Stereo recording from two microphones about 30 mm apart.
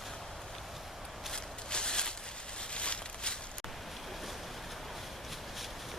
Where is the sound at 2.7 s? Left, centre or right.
Left.